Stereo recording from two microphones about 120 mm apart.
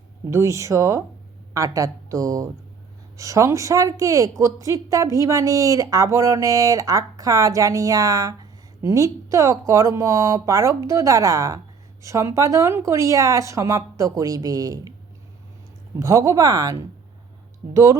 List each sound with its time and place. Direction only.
0.3 s a woman's voice: 25° right (ahead or behind)
16.0 s a woman's voice: 25° right (ahead or behind)